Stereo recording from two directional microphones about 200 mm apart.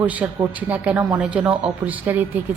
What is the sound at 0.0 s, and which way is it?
A woman's voice, 10° right (ahead or behind).